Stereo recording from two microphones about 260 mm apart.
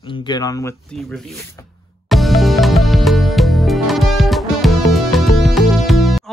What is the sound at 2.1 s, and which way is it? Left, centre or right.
Music, centre.